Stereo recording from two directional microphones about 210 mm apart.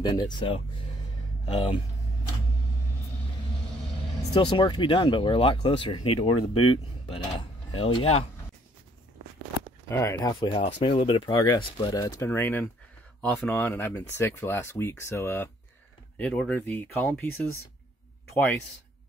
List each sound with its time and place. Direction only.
0.0 s speech: 20° left (ahead or behind)
4.3 s speech: 20° left (ahead or behind)
6.5 s speech: 90° left
7.3 s speech: 25° left (ahead or behind)
9.8 s speech: 10° left (ahead or behind)
10.5 s speech: 30° left (ahead or behind); by 18.6 s 10° left (ahead or behind)